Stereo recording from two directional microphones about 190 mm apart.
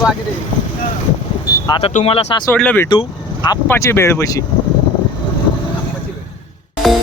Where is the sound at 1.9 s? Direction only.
30° left (ahead or behind).